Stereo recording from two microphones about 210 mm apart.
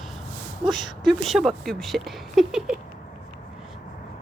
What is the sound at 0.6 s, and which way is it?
Speech, 20° right (ahead or behind).